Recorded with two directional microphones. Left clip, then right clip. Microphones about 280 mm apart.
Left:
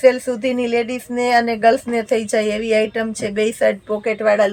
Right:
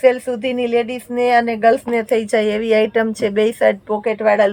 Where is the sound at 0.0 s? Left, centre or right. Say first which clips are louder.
Even; centre.